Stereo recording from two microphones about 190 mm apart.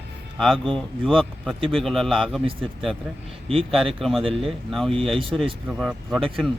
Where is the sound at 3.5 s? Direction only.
30° right (ahead or behind).